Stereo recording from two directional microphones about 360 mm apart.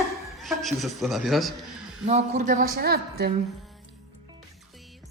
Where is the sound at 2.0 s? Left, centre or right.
Centre.